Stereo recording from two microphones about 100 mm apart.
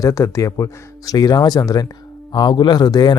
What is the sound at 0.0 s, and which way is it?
Speech, 30° left (ahead or behind).